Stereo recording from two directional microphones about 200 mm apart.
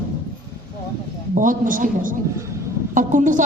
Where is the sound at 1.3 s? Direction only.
40° right (ahead or behind).